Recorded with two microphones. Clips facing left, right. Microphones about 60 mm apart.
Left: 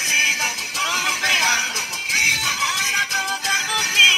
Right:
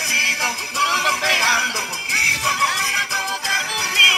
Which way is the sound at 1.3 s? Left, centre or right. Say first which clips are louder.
Right 2 dB; right.